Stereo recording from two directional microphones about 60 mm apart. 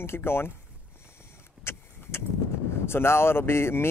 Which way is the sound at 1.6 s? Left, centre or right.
Left.